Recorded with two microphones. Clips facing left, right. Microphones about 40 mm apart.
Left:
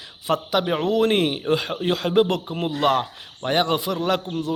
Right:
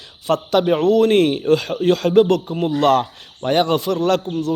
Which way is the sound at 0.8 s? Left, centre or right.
Centre.